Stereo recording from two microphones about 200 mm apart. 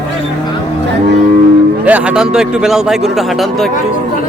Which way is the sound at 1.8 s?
5° right (ahead or behind).